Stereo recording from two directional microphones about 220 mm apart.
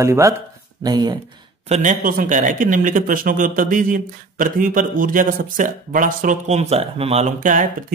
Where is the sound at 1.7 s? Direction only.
35° right (ahead or behind).